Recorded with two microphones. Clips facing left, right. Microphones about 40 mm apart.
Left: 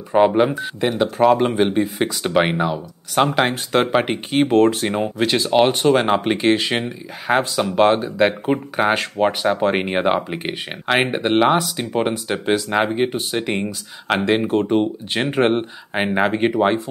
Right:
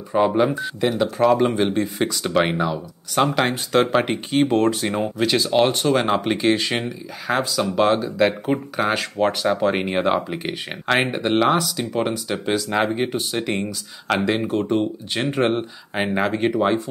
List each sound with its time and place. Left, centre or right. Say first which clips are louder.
0.1 s speech: left 3 dB; centre
4.0 s speech: left 1 dB; left
7.2 s speech: left 3 dB; left